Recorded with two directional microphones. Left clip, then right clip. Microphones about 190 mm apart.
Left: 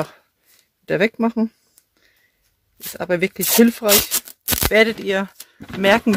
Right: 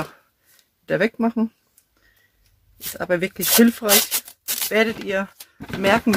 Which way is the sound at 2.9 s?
45° left (ahead or behind).